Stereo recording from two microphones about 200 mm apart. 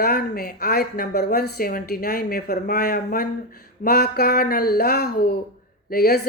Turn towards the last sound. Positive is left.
turn(degrees=50)  # may be behind; listen again after turning